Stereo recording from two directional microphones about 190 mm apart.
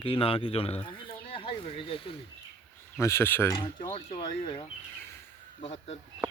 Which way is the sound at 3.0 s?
15° left (ahead or behind).